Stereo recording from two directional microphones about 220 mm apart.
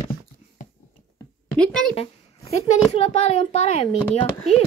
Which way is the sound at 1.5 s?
5° left (ahead or behind).